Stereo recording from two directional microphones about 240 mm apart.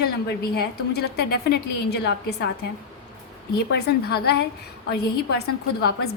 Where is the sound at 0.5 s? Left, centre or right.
Left.